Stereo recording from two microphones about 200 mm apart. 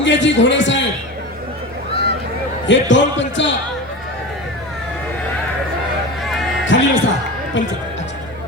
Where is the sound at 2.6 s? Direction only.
65° left (ahead or behind).